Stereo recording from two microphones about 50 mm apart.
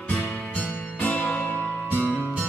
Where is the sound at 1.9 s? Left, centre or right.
Right.